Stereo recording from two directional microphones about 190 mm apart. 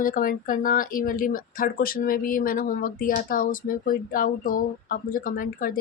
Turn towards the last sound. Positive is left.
turn(degrees=45)  # may be behind; listen again after turning